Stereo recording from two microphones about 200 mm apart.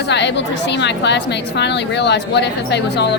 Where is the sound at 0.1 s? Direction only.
60° left (ahead or behind).